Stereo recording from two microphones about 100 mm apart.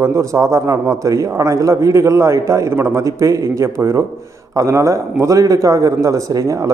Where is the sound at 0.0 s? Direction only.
30° right (ahead or behind).